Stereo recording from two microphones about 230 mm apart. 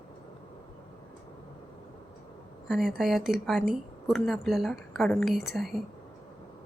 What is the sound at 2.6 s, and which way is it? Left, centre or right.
Speech, centre.